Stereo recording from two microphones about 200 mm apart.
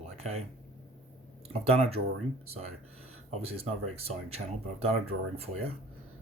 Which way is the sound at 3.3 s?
30° right (ahead or behind).